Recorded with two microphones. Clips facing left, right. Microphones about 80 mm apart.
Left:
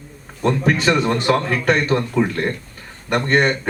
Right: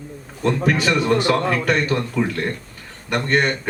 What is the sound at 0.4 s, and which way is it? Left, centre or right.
Speech, left.